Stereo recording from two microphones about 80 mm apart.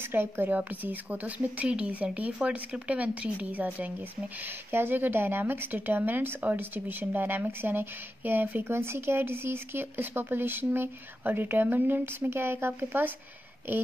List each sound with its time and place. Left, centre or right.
0.0 s speech: right